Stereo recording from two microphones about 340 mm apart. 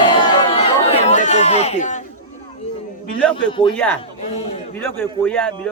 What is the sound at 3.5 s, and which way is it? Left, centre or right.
Speech, centre.